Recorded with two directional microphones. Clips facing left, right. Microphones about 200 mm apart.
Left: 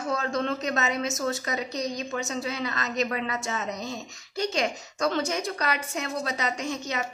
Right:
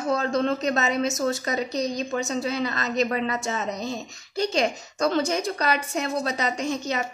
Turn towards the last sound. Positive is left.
turn(degrees=-35)  # may be behind; listen again after turning